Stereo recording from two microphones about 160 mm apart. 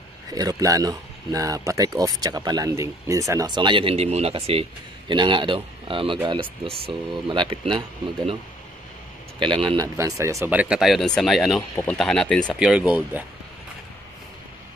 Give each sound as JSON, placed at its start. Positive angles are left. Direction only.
{"t": 0.3, "sound": "speech", "side_deg": -25}
{"t": 9.4, "sound": "speech", "side_deg": -30}
{"t": 9.9, "sound": "speech", "side_deg": -20}
{"t": 12.5, "sound": "speech", "side_deg": -5}